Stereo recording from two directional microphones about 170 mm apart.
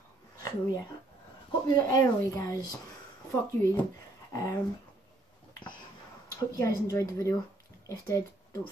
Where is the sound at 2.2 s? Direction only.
20° left (ahead or behind).